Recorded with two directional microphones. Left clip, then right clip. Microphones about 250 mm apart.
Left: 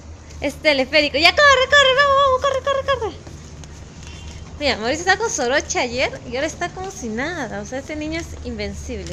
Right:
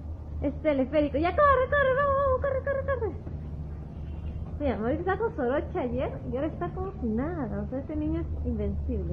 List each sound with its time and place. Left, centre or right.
0.4 s a woman's voice: centre
4.6 s a woman's voice: left